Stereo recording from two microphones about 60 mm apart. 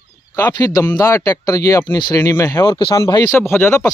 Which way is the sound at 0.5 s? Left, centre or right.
Left.